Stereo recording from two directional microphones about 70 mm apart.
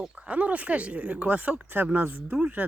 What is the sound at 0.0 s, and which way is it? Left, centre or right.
Speech, centre.